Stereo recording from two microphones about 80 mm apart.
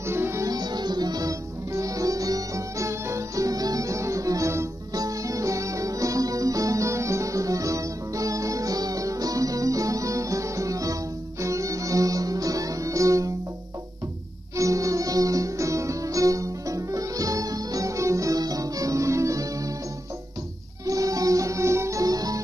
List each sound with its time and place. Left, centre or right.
0.0 s music: right
0.5 s music: right
14.6 s music: right
20.8 s music: right